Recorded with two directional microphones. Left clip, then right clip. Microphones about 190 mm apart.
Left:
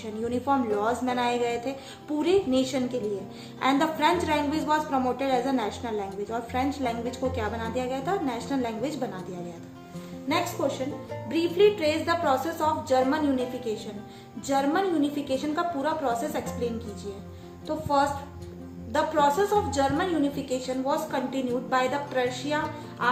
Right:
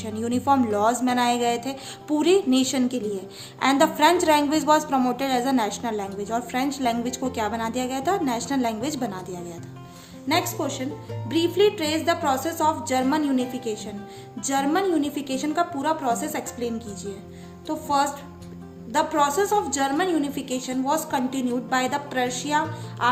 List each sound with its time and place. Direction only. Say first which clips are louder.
0.0 s a woman's voice: right 4 dB; 50° right (ahead or behind)
10.2 s a woman's voice: right 2 dB; 50° right (ahead or behind)
14.4 s a woman's voice: right 2 dB; 50° right (ahead or behind)
17.7 s a woman's voice: right 2 dB; 50° right (ahead or behind)